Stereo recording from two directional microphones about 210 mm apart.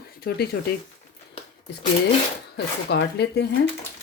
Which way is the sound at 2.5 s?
55° left (ahead or behind).